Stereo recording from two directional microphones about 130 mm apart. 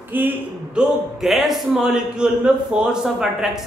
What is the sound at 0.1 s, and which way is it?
Speech, 15° right (ahead or behind).